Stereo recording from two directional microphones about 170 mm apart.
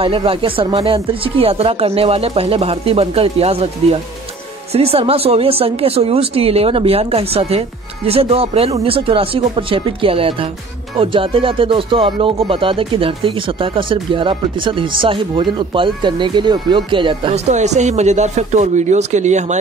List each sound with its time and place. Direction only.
0.0 s speech: 30° right (ahead or behind)
17.5 s speech: 45° right (ahead or behind)